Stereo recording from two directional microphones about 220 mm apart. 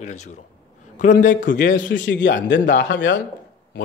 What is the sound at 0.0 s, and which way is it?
Speech, 30° left (ahead or behind).